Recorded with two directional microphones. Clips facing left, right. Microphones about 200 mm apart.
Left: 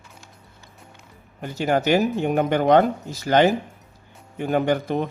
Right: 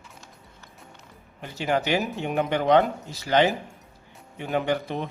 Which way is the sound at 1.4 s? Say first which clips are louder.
Left 5 dB; 45° left (ahead or behind).